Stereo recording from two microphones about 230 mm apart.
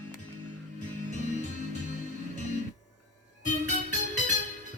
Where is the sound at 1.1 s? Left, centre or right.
Right.